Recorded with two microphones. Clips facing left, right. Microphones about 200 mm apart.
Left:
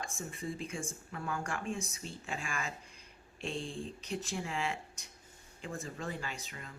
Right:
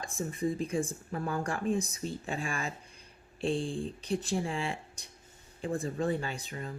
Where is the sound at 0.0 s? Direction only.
35° right (ahead or behind).